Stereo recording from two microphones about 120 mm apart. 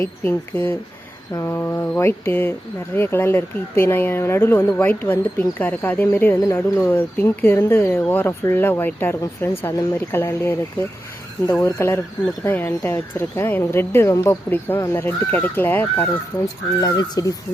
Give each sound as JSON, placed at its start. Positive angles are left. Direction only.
{"t": 0.0, "sound": "speech", "side_deg": 15}
{"t": 11.6, "sound": "speech", "side_deg": 20}
{"t": 16.8, "sound": "speech", "side_deg": 30}